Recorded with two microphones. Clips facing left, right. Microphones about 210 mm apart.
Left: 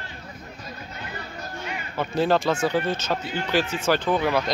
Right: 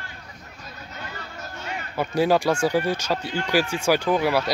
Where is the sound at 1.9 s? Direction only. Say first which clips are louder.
Right 2 dB; 10° right (ahead or behind).